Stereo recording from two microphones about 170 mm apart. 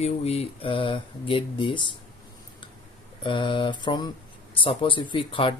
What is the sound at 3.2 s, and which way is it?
Speech, 30° left (ahead or behind).